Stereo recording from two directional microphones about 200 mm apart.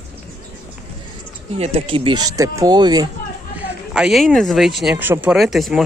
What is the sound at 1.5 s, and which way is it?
Speech, 30° right (ahead or behind).